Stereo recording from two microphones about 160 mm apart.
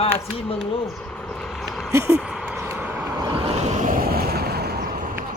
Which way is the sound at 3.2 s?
25° right (ahead or behind).